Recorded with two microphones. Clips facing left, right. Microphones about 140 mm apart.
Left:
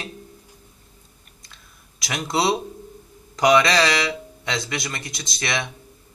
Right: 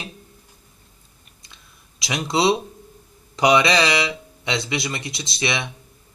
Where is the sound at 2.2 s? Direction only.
25° right (ahead or behind).